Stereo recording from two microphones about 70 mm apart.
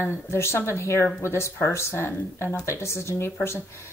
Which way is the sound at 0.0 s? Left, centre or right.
Left.